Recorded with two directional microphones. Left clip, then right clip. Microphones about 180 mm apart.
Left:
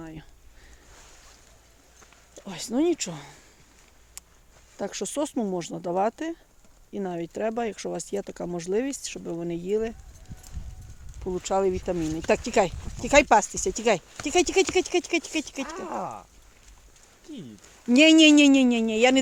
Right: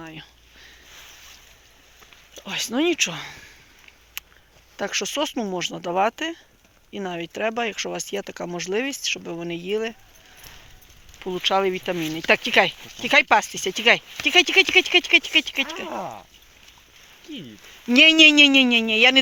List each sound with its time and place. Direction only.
0.0 s a sound: 20° left (ahead or behind)
2.5 s speech: 15° left (ahead or behind)
4.2 s a sound: 10° left (ahead or behind)
4.8 s speech: 15° left (ahead or behind)
11.4 s speech: 10° left (ahead or behind)
15.7 s speech: 50° right (ahead or behind)
17.8 s speech: 20° left (ahead or behind)